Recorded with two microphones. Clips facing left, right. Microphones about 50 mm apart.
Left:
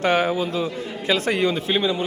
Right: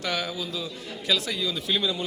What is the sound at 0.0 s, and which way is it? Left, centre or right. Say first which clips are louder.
A man's voice: left 10 dB; left.